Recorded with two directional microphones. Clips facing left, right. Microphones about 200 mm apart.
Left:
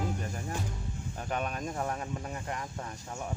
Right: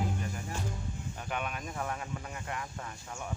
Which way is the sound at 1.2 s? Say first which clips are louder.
Left 4 dB; 40° left (ahead or behind).